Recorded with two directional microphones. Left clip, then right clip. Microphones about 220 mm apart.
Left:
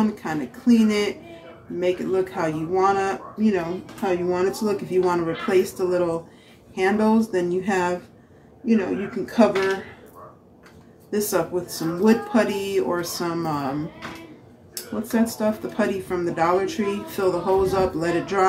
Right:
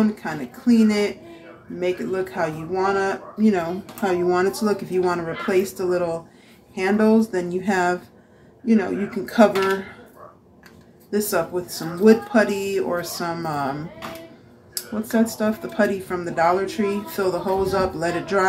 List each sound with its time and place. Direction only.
0.0 s speech: 10° right (ahead or behind)
11.1 s speech: 10° right (ahead or behind)